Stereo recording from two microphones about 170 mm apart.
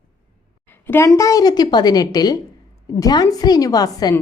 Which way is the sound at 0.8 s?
15° left (ahead or behind).